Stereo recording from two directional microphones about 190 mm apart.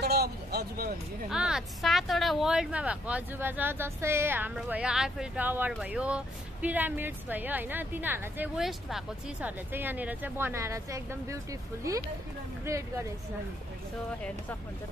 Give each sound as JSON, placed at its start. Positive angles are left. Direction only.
{"t": 0.0, "sound": "vehicle", "side_deg": -55}
{"t": 1.3, "sound": "speech", "side_deg": -5}